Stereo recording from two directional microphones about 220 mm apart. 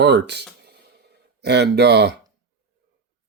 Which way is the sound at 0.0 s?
50° right (ahead or behind).